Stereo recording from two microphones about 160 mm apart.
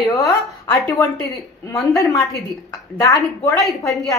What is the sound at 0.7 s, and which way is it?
A woman's voice, 10° left (ahead or behind).